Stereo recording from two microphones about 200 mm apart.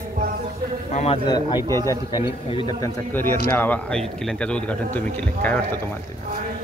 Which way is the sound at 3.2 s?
10° left (ahead or behind).